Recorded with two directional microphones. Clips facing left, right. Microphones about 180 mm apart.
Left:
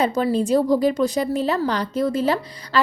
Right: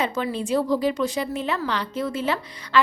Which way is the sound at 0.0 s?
40° left (ahead or behind).